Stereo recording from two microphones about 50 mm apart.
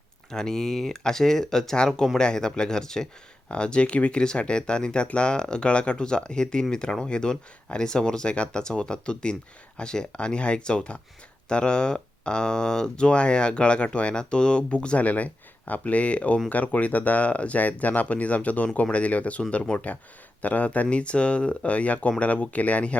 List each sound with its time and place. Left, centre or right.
0.3 s speech: centre